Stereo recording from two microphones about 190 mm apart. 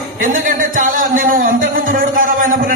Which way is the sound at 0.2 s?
45° right (ahead or behind).